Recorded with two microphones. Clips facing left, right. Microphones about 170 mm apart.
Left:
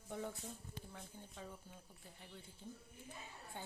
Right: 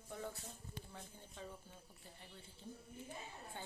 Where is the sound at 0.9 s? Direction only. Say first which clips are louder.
Left 1 dB; centre (ahead or behind).